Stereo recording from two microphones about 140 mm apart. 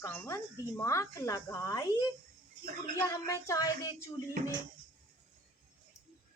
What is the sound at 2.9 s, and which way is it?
A woman's voice, 20° left (ahead or behind).